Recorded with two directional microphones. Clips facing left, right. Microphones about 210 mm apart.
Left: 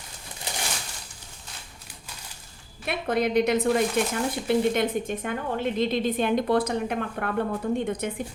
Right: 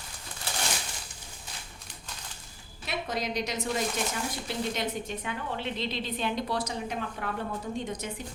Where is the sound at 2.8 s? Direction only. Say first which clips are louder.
Left 7 dB; 55° left (ahead or behind).